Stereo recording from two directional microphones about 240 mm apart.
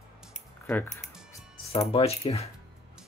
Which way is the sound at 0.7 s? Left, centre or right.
Centre.